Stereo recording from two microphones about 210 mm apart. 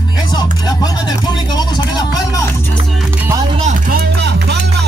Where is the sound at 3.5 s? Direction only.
35° right (ahead or behind); by 4.9 s 50° right (ahead or behind).